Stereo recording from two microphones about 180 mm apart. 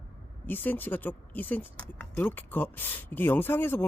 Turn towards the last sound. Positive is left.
turn(degrees=10)  # may be behind; listen again after turning